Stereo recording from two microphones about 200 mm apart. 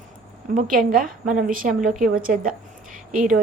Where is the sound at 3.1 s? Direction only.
40° right (ahead or behind).